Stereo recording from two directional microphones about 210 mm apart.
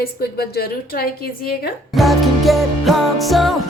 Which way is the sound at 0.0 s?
45° left (ahead or behind).